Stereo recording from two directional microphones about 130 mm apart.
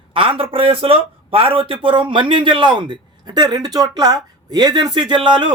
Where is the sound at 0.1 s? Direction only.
45° right (ahead or behind).